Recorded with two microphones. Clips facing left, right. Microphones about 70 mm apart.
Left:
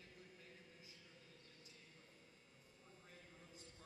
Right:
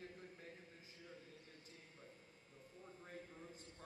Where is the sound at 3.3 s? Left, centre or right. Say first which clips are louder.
Right 5 dB; right.